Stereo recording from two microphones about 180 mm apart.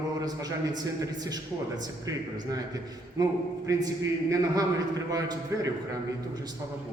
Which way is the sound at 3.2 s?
20° right (ahead or behind).